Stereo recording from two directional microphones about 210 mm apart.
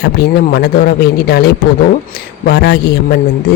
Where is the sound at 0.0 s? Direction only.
50° left (ahead or behind).